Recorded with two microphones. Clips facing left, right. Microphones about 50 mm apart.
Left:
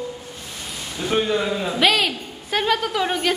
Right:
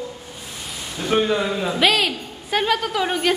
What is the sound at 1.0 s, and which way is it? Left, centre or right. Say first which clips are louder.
A man's voice: right 1 dB; centre.